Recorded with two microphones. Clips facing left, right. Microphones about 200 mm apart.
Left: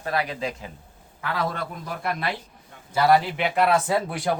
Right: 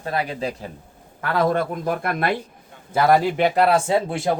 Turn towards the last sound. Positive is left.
turn(degrees=-25)  # may be behind; listen again after turning